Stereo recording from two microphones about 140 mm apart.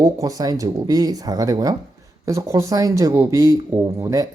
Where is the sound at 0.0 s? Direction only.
25° right (ahead or behind).